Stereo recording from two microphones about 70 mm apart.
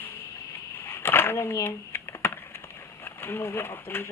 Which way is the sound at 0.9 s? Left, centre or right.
Left.